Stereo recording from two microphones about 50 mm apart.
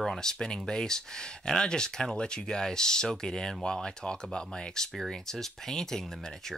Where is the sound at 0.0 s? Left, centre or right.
Centre.